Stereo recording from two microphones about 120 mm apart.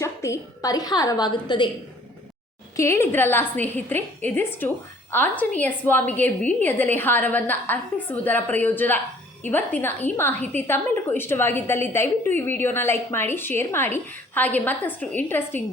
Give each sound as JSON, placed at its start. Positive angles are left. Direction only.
{"t": 0.0, "sound": "a woman's voice", "side_deg": 25}
{"t": 2.7, "sound": "a woman's voice", "side_deg": 20}